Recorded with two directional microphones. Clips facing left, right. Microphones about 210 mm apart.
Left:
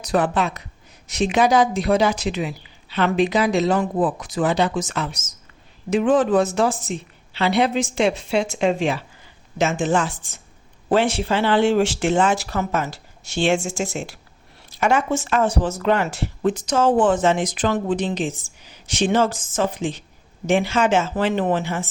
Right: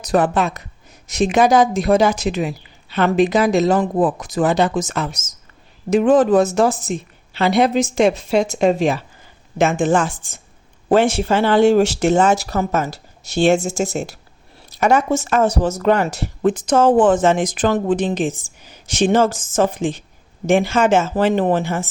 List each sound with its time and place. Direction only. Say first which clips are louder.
0.0 s speech: right 3 dB; 45° right (ahead or behind)
9.6 s speech: right 4 dB; 55° right (ahead or behind)